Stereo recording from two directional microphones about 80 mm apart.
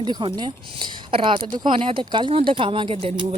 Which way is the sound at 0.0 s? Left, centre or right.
Right.